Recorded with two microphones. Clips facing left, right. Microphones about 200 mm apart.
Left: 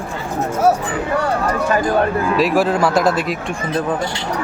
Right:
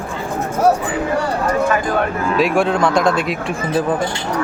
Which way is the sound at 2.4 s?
Centre (ahead or behind).